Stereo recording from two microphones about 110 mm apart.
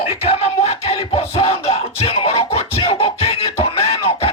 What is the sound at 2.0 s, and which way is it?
Music, 60° left (ahead or behind).